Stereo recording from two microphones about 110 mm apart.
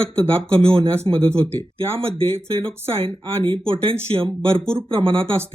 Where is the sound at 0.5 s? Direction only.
55° right (ahead or behind).